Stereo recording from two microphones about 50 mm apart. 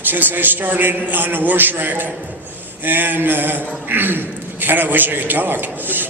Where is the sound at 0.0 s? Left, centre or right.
Right.